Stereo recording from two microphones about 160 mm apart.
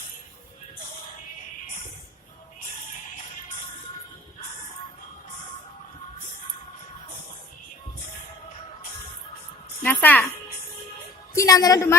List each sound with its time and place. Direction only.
9.8 s a child's voice: 10° left (ahead or behind)
11.3 s a woman's voice: 20° left (ahead or behind)